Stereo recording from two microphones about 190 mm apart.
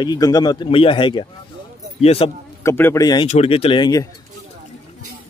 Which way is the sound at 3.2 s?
35° left (ahead or behind).